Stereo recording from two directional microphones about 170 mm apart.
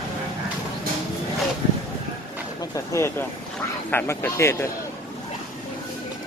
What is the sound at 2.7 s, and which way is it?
Speech, 15° left (ahead or behind).